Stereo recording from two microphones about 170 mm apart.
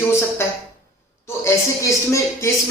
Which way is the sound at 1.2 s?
15° left (ahead or behind).